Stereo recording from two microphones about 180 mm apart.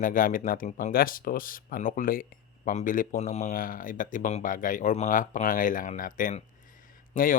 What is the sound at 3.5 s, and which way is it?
Speech, 50° left (ahead or behind).